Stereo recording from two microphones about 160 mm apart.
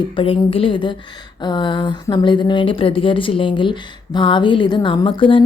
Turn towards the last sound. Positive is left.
turn(degrees=30)  # may be behind; listen again after turning